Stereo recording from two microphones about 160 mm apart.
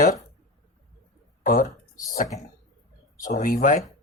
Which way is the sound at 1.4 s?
60° left (ahead or behind).